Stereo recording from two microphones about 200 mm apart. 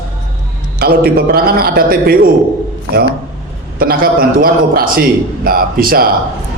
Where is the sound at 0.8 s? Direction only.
50° right (ahead or behind).